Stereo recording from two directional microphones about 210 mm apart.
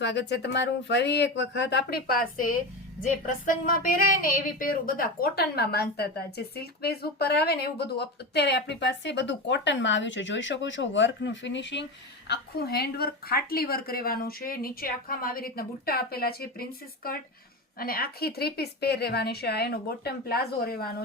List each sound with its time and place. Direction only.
0.0 s speech: 55° left (ahead or behind)